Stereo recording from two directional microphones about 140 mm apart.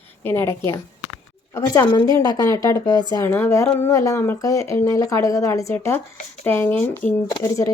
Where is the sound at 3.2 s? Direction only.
15° left (ahead or behind).